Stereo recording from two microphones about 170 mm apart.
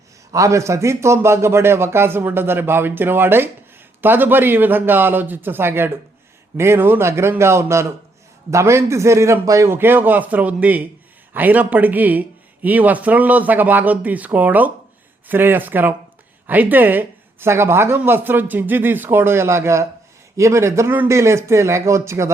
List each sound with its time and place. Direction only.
0.3 s speech: 20° right (ahead or behind)